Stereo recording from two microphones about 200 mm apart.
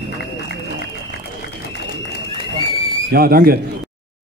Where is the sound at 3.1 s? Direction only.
45° right (ahead or behind).